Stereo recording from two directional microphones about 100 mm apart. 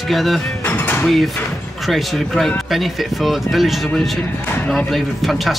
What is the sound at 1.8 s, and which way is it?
Speech, centre (ahead or behind).